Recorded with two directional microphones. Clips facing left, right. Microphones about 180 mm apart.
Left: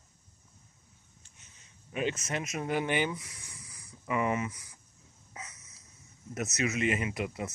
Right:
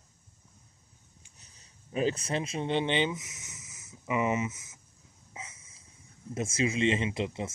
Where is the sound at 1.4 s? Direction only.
35° right (ahead or behind).